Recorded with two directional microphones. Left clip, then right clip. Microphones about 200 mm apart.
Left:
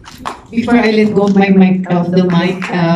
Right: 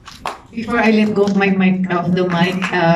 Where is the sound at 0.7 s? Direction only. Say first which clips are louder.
Left 2 dB; 20° left (ahead or behind).